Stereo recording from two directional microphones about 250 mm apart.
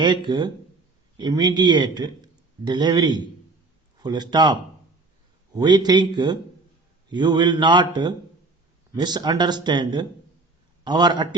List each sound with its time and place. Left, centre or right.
0.0 s a man's voice: centre
5.5 s speech: centre